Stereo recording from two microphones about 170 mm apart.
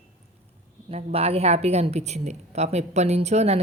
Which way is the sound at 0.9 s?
35° right (ahead or behind).